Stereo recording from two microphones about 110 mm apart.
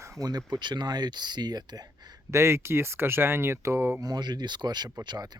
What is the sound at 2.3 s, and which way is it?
Speech, 25° right (ahead or behind).